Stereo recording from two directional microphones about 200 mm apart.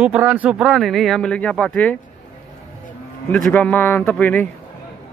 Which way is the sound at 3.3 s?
5° left (ahead or behind).